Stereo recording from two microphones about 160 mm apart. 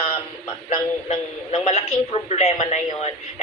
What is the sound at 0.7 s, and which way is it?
A man's voice, 40° left (ahead or behind).